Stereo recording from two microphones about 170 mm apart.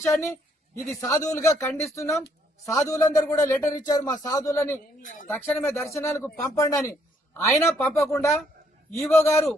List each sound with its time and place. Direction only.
0.0 s a man's voice: 15° left (ahead or behind)
5.0 s speech: 50° left (ahead or behind)
5.3 s speech: 10° left (ahead or behind)